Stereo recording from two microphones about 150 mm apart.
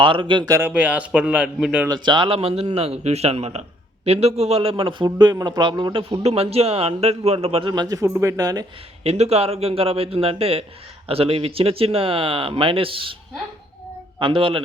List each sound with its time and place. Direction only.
0.0 s a man's voice: 35° right (ahead or behind)
0.6 s speech: 10° right (ahead or behind)
1.9 s a man's voice: 30° right (ahead or behind)
7.7 s speech: 25° right (ahead or behind)
9.0 s a man's voice: 45° right (ahead or behind)
14.2 s a man's voice: 35° right (ahead or behind)